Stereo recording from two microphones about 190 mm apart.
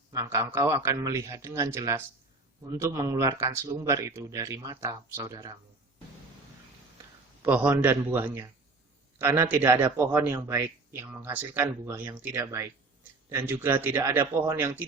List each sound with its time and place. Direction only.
0.1 s a man's voice: 15° right (ahead or behind)
7.4 s a man's voice: 10° right (ahead or behind)